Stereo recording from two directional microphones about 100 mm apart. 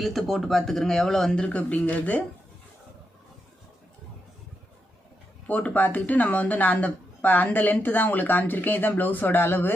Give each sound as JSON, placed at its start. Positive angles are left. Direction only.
{"t": 0.0, "sound": "speech", "side_deg": 0}
{"t": 5.5, "sound": "speech", "side_deg": 15}